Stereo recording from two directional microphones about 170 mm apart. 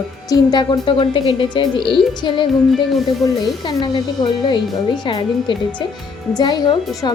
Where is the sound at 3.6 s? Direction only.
25° left (ahead or behind).